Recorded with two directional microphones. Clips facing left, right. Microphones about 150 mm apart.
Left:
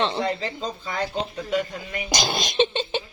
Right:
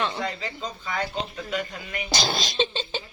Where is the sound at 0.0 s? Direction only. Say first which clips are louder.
Left 4 dB; 30° left (ahead or behind).